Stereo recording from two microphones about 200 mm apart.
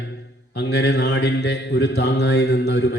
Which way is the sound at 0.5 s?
55° left (ahead or behind).